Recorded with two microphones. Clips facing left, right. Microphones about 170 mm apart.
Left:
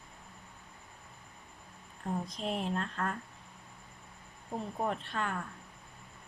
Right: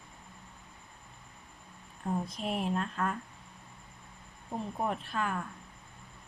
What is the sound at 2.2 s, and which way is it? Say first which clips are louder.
Speech: right 2 dB; 5° right (ahead or behind).